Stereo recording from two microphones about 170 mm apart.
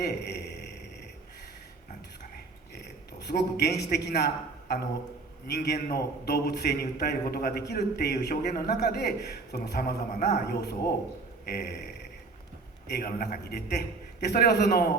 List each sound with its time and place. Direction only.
0.0 s a man's voice: 75° left (ahead or behind)
2.7 s a sound: 75° left (ahead or behind)
3.9 s a man's voice: 75° left (ahead or behind)
5.5 s a man's voice: 70° left (ahead or behind)
11.4 s a sound: 65° left (ahead or behind)
12.9 s a man's voice: 60° left (ahead or behind)